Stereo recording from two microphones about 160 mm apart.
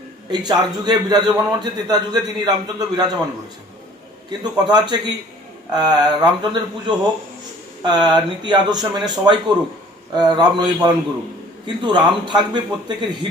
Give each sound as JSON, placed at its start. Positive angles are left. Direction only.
{"t": 0.3, "sound": "a man's voice", "side_deg": -25}
{"t": 4.3, "sound": "a man's voice", "side_deg": -25}